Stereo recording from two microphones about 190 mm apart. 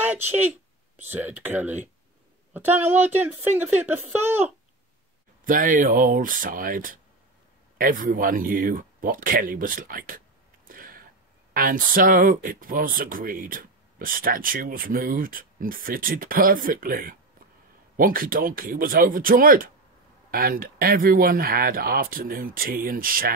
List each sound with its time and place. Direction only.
0.3 s speech: 10° right (ahead or behind)
5.4 s speech: 45° right (ahead or behind)
10.7 s a sound: 50° right (ahead or behind)
11.5 s speech: 50° right (ahead or behind)